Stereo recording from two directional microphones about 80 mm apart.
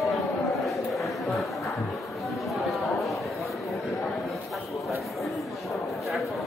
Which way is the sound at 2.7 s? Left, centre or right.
Centre.